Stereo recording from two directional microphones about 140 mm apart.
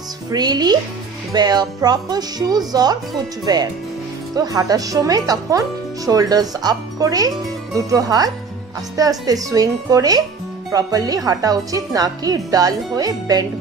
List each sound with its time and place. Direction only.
0.3 s speech: 30° right (ahead or behind)